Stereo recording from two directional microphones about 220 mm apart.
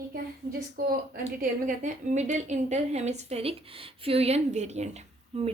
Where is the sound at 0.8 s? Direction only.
40° right (ahead or behind).